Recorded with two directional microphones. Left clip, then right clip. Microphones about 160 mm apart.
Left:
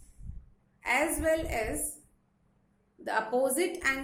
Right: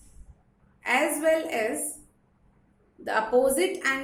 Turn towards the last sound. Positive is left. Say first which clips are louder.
# right 4 dB
turn(degrees=30)  # may be behind; listen again after turning